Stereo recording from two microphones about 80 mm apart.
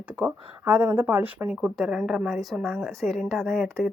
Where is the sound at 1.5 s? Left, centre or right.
Centre.